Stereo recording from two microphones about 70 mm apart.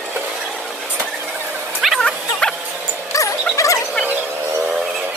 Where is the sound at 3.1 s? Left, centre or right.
Left.